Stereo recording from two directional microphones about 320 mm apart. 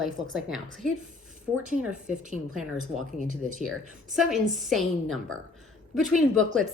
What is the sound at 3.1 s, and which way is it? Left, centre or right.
Speech, right.